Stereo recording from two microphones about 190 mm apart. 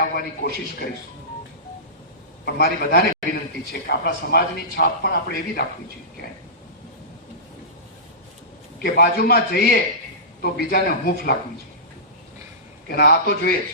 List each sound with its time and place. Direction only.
0.0 s speech: 55° left (ahead or behind)
2.4 s speech: 55° left (ahead or behind)
8.8 s speech: 55° left (ahead or behind)
12.9 s speech: 60° left (ahead or behind)